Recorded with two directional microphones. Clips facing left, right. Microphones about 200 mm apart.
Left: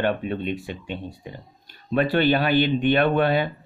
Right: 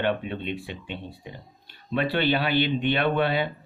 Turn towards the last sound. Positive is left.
turn(degrees=45)  # may be behind; listen again after turning